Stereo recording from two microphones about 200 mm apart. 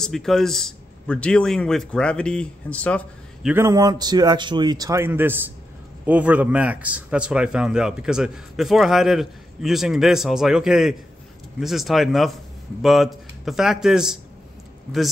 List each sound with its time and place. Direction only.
0.0 s a man's voice: centre (ahead or behind)
3.4 s a man's voice: 15° right (ahead or behind)